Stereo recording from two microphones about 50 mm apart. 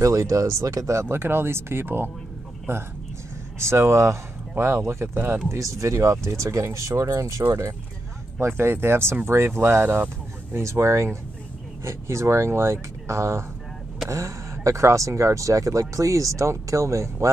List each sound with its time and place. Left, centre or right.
0.0 s speech: right
3.5 s speech: right
5.5 s speech: right
8.4 s speech: right
10.6 s speech: right
14.0 s speech: right